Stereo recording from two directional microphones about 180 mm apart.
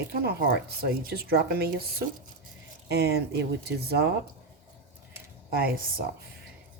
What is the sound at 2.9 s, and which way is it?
Speech, 65° right (ahead or behind).